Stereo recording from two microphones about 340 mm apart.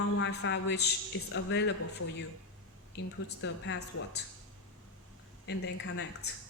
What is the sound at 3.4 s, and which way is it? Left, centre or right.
Speech, left.